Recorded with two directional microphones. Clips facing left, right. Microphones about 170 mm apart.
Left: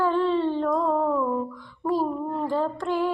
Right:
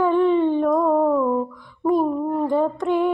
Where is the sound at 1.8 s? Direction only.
20° right (ahead or behind).